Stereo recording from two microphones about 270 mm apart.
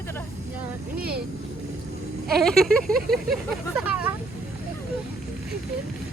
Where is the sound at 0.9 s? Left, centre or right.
Right.